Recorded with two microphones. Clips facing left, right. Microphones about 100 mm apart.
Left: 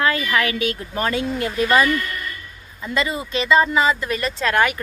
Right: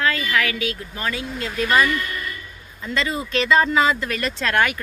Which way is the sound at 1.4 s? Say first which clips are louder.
Even; 25° left (ahead or behind).